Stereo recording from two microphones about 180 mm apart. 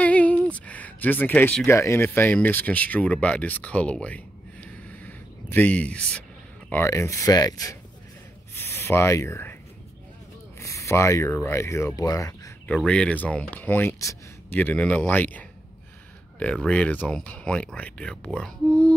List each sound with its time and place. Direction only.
0.0 s a sound: 10° left (ahead or behind)
1.8 s speech: 15° left (ahead or behind)
10.6 s speech: 15° left (ahead or behind)
12.7 s speech: 5° left (ahead or behind)